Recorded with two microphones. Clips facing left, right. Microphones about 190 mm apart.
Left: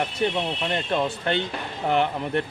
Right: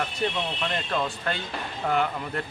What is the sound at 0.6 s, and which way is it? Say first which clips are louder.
Speech: left 3 dB; 20° left (ahead or behind).